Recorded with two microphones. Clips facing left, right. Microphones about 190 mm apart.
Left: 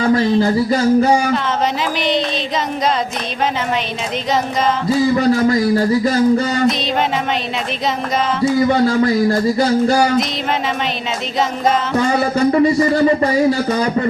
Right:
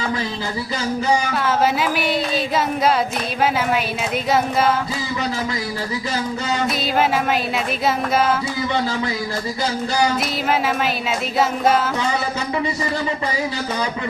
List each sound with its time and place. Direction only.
0.0 s speech: 45° left (ahead or behind)
5.1 s speech: 50° left (ahead or behind)
8.6 s speech: 50° left (ahead or behind)
11.9 s speech: 45° left (ahead or behind)